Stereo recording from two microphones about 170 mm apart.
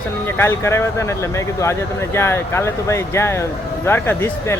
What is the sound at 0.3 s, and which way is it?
Speech, 15° left (ahead or behind).